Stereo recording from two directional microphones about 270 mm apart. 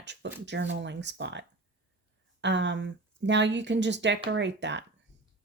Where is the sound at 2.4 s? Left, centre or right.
Right.